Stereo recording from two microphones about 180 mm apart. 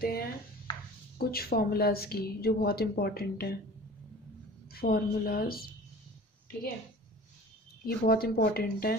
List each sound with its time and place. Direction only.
0.0 s a sound: 55° left (ahead or behind)
1.1 s a woman's voice: 60° left (ahead or behind)
4.6 s a woman's voice: 60° left (ahead or behind)
7.8 s a woman's voice: 55° left (ahead or behind)